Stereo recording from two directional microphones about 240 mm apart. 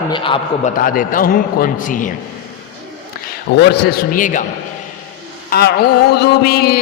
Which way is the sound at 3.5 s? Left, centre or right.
Left.